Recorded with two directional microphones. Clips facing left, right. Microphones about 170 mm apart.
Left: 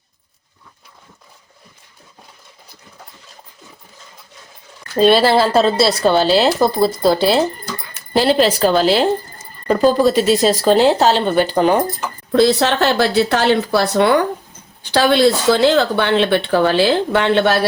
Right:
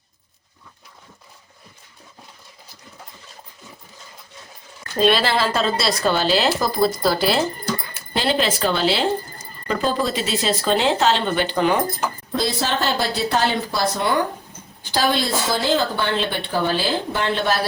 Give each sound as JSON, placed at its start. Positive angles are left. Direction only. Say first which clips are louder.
{"t": 4.9, "sound": "speech", "louder": "left 6 dB", "side_deg": 35}
{"t": 8.1, "sound": "speech", "louder": "left 7 dB", "side_deg": 40}
{"t": 12.3, "sound": "speech", "louder": "left 11 dB", "side_deg": 70}